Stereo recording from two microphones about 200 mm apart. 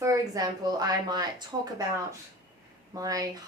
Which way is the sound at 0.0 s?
15° right (ahead or behind).